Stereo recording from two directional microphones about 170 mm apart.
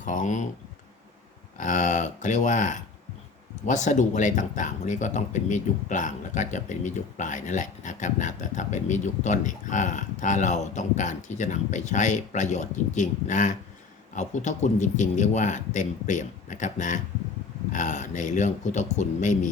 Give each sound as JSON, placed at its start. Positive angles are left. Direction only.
{"t": 0.0, "sound": "speech", "side_deg": 50}
{"t": 1.5, "sound": "speech", "side_deg": 50}